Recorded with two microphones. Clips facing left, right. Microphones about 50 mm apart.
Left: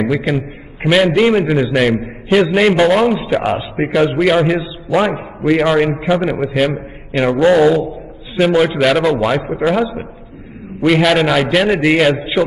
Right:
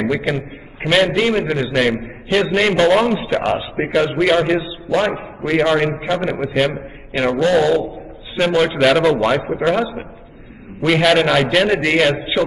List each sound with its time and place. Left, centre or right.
0.0 s a man's voice: centre
8.4 s a man's voice: centre